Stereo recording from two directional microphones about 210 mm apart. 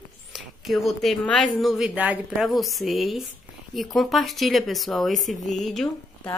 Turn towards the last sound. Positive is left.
turn(degrees=5)  # may be behind; listen again after turning